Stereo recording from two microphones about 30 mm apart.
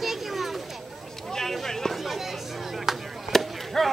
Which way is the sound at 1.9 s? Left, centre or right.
Centre.